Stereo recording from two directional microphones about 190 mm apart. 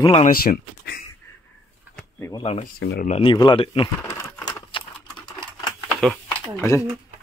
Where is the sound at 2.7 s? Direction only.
55° left (ahead or behind).